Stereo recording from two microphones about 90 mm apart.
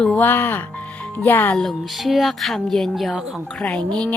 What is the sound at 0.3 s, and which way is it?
A woman's voice, 25° left (ahead or behind).